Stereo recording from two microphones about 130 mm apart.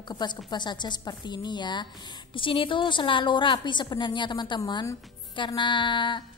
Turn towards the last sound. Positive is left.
turn(degrees=40)  # may be behind; listen again after turning